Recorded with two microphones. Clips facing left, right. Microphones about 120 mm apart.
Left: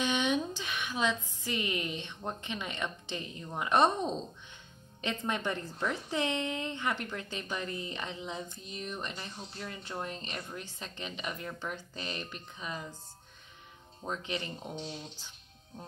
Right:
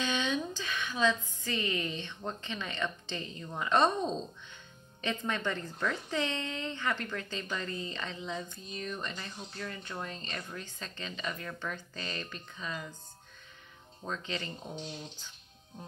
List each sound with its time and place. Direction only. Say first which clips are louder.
0.0 s a sound: left 2 dB; 20° left (ahead or behind)
0.6 s a woman's voice: right 1 dB; 20° left (ahead or behind)
14.0 s a woman's voice: left 1 dB; 15° left (ahead or behind)